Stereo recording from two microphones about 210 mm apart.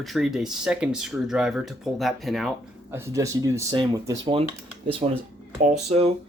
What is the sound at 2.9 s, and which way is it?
Speech, 15° right (ahead or behind).